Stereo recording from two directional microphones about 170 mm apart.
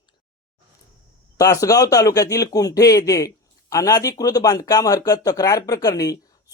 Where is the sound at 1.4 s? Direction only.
20° left (ahead or behind).